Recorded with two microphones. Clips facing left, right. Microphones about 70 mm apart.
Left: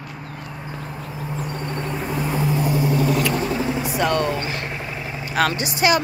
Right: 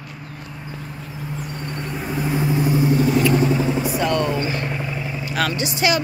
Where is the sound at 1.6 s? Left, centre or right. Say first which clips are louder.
Left 2 dB; left.